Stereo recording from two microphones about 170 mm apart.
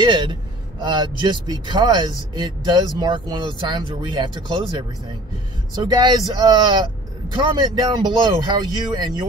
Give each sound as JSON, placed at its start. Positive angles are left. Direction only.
{"t": 0.0, "sound": "speech", "side_deg": -25}
{"t": 5.9, "sound": "speech", "side_deg": -25}